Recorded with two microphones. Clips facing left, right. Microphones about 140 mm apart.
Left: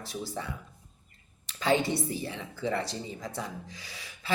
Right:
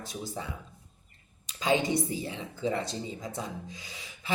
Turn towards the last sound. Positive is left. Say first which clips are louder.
# left 1 dB
turn(degrees=-20)  # may be behind; listen again after turning